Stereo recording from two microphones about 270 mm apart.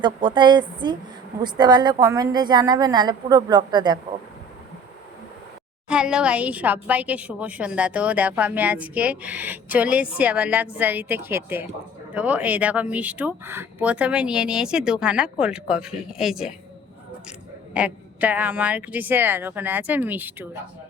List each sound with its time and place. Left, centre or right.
0.0 s speech: centre
5.9 s a woman's voice: centre
17.7 s speech: centre